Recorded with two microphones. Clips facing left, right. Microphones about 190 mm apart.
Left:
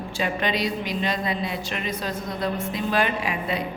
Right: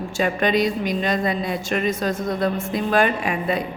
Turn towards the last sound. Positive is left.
turn(degrees=-50)  # may be behind; listen again after turning